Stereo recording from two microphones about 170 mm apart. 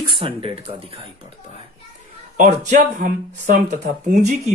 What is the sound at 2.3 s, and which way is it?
Speech, 50° right (ahead or behind).